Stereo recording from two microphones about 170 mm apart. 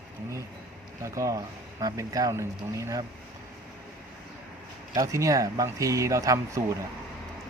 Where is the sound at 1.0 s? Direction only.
20° right (ahead or behind).